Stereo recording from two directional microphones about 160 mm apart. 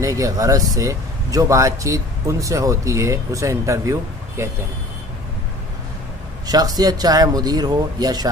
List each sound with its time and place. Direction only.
0.0 s speech: 20° right (ahead or behind)
6.4 s speech: 25° right (ahead or behind)